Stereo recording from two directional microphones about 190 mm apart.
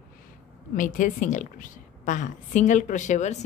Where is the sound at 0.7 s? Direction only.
45° left (ahead or behind).